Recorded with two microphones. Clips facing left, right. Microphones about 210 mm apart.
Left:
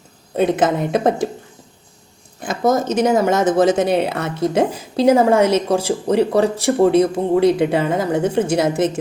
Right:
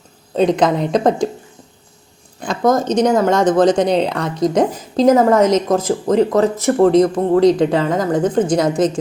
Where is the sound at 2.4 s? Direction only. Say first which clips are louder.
Right 2 dB; 5° left (ahead or behind).